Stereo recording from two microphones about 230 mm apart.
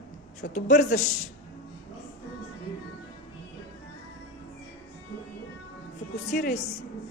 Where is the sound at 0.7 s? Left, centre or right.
Left.